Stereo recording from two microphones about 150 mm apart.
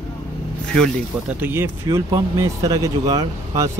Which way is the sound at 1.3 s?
15° right (ahead or behind).